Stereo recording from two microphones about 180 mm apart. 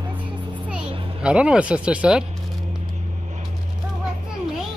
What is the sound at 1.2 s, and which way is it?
Speech, 5° right (ahead or behind).